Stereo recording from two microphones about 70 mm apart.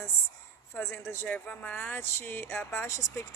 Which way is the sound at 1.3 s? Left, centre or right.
Left.